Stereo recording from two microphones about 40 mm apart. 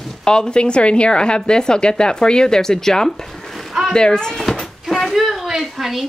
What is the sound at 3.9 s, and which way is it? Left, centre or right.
Speech, centre.